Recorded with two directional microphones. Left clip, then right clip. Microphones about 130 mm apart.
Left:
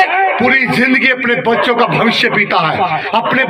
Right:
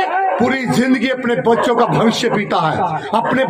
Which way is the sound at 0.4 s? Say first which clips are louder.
Left 5 dB; 45° right (ahead or behind).